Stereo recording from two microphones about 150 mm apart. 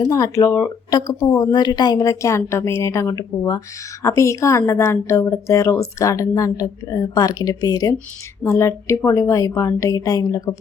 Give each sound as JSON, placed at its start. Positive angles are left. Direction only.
{"t": 0.0, "sound": "a woman's voice", "side_deg": 20}